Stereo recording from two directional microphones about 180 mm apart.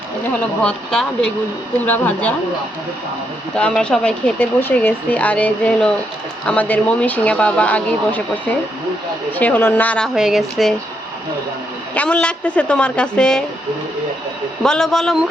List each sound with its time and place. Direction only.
0.6 s speech: 5° left (ahead or behind)
3.5 s speech: 5° left (ahead or behind)
9.3 s speech: 10° left (ahead or behind)
10.2 s speech: centre (ahead or behind)
11.9 s speech: 5° left (ahead or behind)
14.6 s speech: 5° left (ahead or behind)